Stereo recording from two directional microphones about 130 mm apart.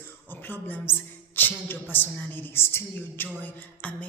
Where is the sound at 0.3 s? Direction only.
15° left (ahead or behind).